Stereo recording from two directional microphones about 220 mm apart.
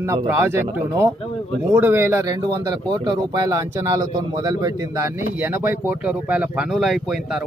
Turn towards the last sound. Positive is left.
turn(degrees=0)  # may be behind; listen again after turning